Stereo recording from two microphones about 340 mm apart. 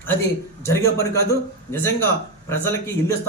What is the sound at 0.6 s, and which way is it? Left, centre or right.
A man's voice, centre.